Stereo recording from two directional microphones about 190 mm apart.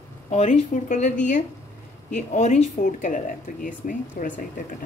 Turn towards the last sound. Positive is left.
turn(degrees=45)  # may be behind; listen again after turning